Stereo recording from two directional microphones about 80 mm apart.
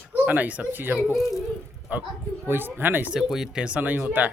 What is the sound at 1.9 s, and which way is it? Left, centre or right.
Speech, centre.